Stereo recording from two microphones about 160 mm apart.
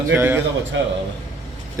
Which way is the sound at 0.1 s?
10° right (ahead or behind).